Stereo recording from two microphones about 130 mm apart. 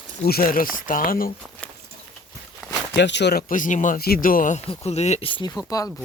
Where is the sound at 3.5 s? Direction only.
80° left.